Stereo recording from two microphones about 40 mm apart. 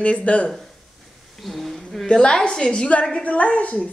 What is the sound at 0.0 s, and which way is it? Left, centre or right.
Speech, left.